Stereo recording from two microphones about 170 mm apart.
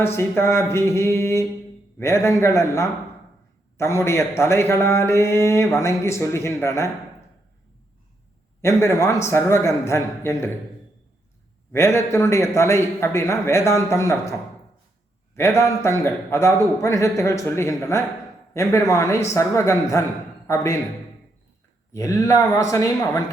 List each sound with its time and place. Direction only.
0.2 s a man's voice: 15° left (ahead or behind)
8.6 s a man's voice: 20° left (ahead or behind)
11.7 s a man's voice: 15° left (ahead or behind)
15.4 s a man's voice: 15° left (ahead or behind)
21.9 s speech: 20° left (ahead or behind)